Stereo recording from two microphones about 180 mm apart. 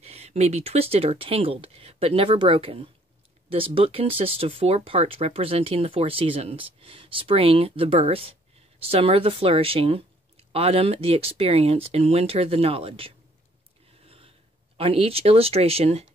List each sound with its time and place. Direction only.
0.0 s speech: 35° right (ahead or behind)
14.0 s a sound: 30° right (ahead or behind)
14.8 s speech: 30° right (ahead or behind)